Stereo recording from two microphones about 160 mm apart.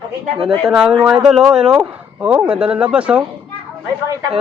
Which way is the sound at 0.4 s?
5° right (ahead or behind).